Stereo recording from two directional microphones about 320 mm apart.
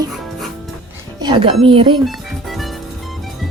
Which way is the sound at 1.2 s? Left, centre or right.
Centre.